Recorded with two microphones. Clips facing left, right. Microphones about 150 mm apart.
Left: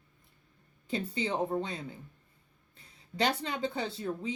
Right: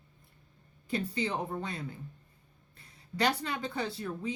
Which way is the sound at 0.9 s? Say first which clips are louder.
Even; 25° left (ahead or behind).